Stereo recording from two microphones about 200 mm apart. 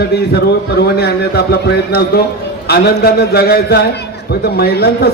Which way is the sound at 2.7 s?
50° left (ahead or behind).